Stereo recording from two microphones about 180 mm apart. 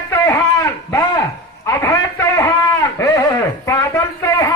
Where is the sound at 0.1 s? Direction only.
15° left (ahead or behind).